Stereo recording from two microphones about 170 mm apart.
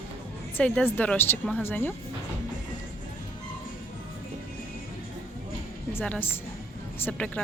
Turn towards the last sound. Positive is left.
turn(degrees=5)  # may be behind; listen again after turning